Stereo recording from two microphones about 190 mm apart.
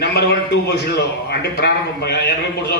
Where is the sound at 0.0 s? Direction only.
60° left (ahead or behind).